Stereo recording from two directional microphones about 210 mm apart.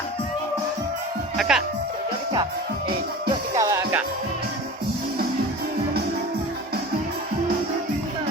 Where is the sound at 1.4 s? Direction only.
Centre (ahead or behind).